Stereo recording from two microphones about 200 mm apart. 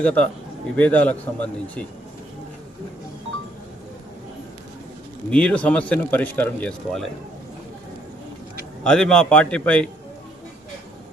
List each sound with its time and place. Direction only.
0.0 s speech: 5° left (ahead or behind)
5.3 s speech: 5° left (ahead or behind)
8.8 s a man's voice: 5° left (ahead or behind)